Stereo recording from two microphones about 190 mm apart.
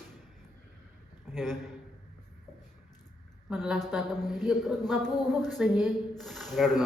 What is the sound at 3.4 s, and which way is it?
Speech, 5° right (ahead or behind).